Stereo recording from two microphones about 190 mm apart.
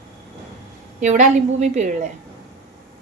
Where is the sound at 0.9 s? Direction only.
40° right (ahead or behind).